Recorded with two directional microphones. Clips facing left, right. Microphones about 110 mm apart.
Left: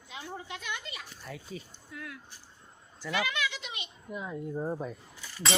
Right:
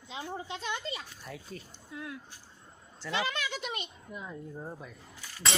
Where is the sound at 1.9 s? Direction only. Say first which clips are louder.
Right 5 dB; 25° right (ahead or behind).